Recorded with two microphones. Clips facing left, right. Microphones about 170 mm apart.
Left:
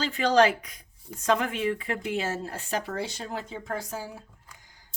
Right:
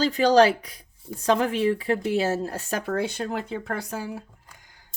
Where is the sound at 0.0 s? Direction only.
35° right (ahead or behind); by 4.2 s 65° right (ahead or behind).